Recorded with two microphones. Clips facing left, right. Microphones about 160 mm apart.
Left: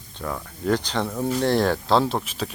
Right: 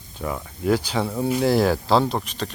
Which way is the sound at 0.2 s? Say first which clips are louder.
Right 2 dB; 5° right (ahead or behind).